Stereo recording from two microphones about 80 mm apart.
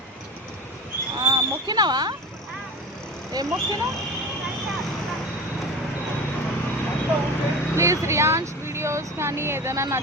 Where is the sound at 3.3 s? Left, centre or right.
Right.